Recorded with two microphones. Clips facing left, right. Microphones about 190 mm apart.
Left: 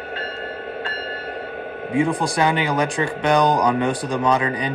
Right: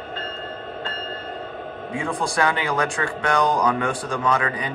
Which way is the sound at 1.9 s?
15° left (ahead or behind).